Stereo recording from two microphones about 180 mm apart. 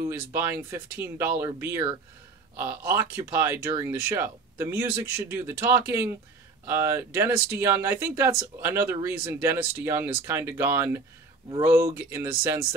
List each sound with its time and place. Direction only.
0.3 s speech: 15° right (ahead or behind)